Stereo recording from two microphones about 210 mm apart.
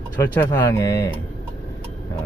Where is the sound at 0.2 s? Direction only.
15° left (ahead or behind).